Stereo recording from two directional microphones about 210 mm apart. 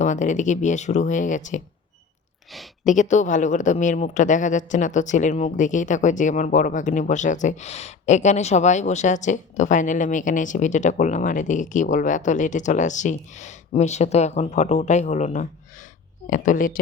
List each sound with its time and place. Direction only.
0.0 s a woman's voice: 35° left (ahead or behind)
2.5 s a woman's voice: centre (ahead or behind)
2.9 s a woman's voice: 35° left (ahead or behind)